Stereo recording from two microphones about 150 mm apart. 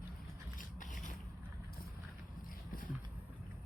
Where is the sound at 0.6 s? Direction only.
60° left (ahead or behind).